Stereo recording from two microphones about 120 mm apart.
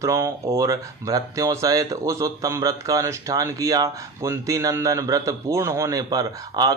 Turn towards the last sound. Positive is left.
turn(degrees=-35)  # may be behind; listen again after turning